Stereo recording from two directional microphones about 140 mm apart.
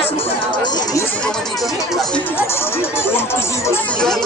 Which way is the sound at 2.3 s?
15° left (ahead or behind).